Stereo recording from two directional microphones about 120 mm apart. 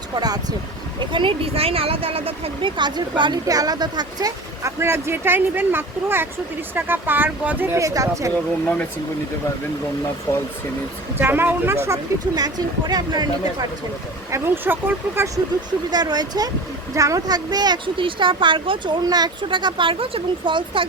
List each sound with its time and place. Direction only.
0.2 s speech: 35° right (ahead or behind)
0.9 s speech: 45° right (ahead or behind)
4.8 s a woman's voice: 20° right (ahead or behind)
10.3 s speech: 25° left (ahead or behind)
11.2 s a woman's voice: 15° right (ahead or behind); by 13.7 s 35° right (ahead or behind)
14.3 s a woman's voice: 20° right (ahead or behind)
15.9 s speech: 35° right (ahead or behind)